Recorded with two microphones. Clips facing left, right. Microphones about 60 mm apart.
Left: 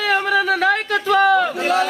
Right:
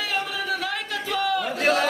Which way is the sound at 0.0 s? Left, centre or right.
Left.